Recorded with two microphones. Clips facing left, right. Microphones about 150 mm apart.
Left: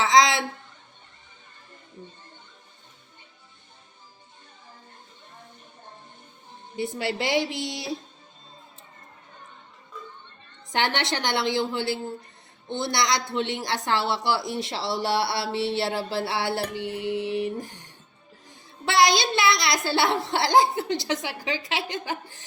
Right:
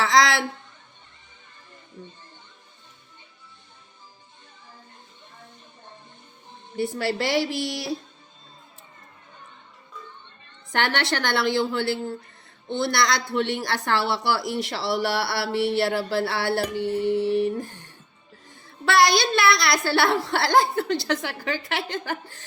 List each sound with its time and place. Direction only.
0.0 s a sound: 20° left (ahead or behind)
6.7 s a woman's voice: 20° left (ahead or behind)
10.7 s a woman's voice: 20° left (ahead or behind)
16.7 s music: 15° left (ahead or behind)
18.4 s a woman's voice: 20° left (ahead or behind)
22.0 s music: 15° left (ahead or behind)